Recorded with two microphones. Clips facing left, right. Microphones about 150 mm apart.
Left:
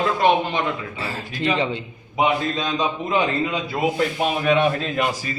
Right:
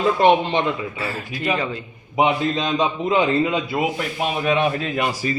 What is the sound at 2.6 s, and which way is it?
Speech, 20° right (ahead or behind).